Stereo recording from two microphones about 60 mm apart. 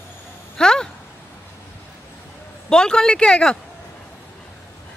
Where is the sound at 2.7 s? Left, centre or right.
Centre.